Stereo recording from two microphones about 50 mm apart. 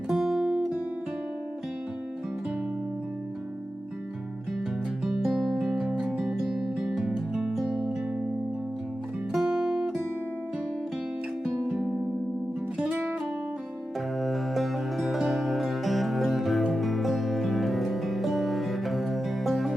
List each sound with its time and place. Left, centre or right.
0.1 s guitar: centre
5.3 s music: centre
9.3 s music: centre
12.7 s music: right
14.2 s music: centre